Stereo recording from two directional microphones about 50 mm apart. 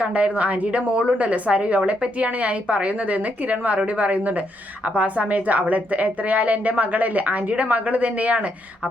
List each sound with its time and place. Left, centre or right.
0.0 s a woman's voice: right